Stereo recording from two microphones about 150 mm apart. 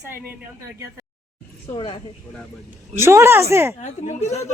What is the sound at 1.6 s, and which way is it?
Speech, 40° left (ahead or behind).